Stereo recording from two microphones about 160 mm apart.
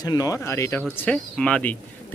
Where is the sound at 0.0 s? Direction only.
25° left (ahead or behind).